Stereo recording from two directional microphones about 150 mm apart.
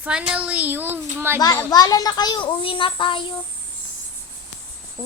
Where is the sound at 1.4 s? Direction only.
25° left (ahead or behind).